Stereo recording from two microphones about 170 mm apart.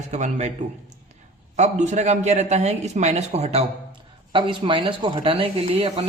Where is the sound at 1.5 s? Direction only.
45° right (ahead or behind).